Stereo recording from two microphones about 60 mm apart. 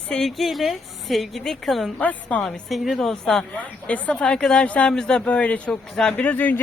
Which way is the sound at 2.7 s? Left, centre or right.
Centre.